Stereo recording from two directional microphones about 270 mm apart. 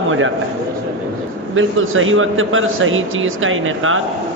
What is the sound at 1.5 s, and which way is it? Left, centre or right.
Speech, right.